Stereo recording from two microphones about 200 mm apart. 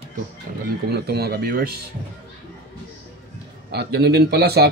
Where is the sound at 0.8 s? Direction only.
55° right (ahead or behind).